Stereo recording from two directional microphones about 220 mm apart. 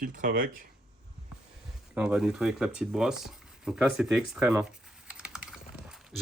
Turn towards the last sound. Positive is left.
turn(degrees=-5)  # may be behind; listen again after turning